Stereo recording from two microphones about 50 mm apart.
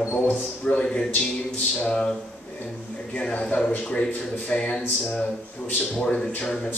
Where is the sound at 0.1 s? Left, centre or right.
Left.